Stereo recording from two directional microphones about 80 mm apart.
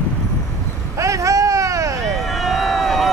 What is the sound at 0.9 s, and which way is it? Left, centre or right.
Vehicle, right.